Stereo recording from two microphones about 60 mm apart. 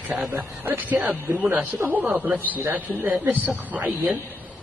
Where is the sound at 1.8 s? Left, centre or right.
Right.